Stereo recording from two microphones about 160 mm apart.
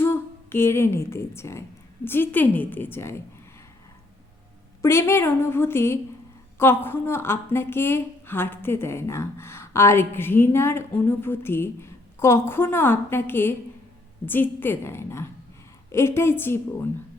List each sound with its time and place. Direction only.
0.0 s a woman's voice: 15° left (ahead or behind)
4.8 s a woman's voice: 15° left (ahead or behind)